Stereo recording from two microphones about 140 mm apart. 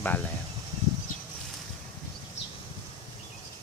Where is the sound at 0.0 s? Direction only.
10° left (ahead or behind).